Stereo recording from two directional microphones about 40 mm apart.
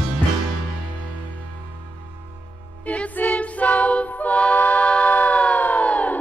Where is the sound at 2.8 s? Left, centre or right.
Left.